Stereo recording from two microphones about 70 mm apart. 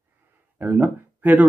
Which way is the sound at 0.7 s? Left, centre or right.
Right.